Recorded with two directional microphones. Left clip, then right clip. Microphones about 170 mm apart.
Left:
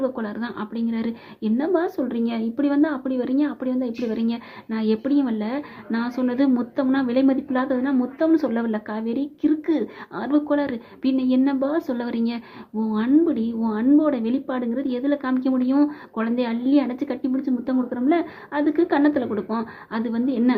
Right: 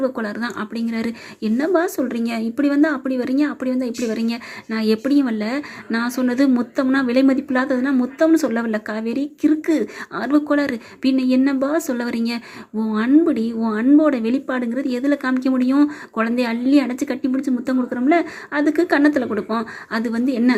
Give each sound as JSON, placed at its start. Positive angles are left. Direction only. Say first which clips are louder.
{"t": 0.0, "sound": "a woman's voice", "louder": "right 4 dB", "side_deg": -20}